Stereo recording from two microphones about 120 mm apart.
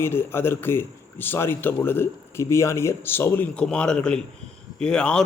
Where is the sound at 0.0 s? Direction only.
20° left (ahead or behind).